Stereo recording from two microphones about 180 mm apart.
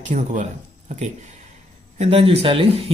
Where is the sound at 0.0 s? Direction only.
40° right (ahead or behind).